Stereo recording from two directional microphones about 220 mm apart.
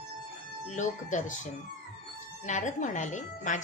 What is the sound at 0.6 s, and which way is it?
Speech, 35° left (ahead or behind).